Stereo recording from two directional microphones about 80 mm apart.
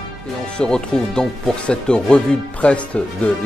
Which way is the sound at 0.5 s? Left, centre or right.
Centre.